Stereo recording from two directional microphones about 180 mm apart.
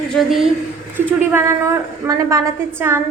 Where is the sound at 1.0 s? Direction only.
15° right (ahead or behind).